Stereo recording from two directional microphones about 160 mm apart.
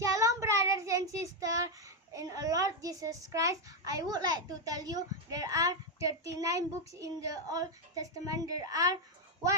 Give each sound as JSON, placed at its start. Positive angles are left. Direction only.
{"t": 0.0, "sound": "child singing", "side_deg": -20}
{"t": 2.1, "sound": "a child's voice", "side_deg": -20}